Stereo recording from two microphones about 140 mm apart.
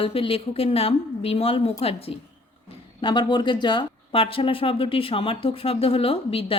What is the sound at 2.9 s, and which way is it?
A woman's voice, 35° left (ahead or behind).